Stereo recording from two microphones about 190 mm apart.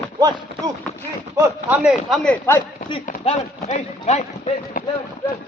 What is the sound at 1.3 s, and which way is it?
Speech, 10° right (ahead or behind).